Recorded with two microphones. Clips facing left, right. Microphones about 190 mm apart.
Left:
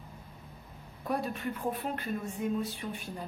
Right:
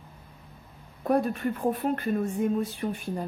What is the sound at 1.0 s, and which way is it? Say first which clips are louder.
Speech: right 8 dB; 50° right (ahead or behind).